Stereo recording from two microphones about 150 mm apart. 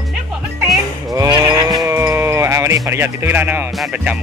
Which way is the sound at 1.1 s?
25° right (ahead or behind).